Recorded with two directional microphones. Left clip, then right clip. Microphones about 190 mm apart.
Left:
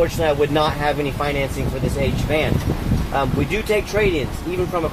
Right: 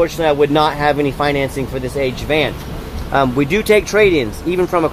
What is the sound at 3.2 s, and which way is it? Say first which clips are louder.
Speech: right 7 dB; 50° right (ahead or behind).